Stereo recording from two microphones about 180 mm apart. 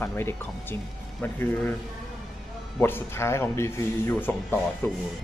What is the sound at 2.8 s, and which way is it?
Speech, 10° left (ahead or behind).